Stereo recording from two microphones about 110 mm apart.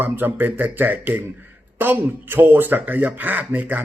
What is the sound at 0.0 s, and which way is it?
Speech, 20° right (ahead or behind).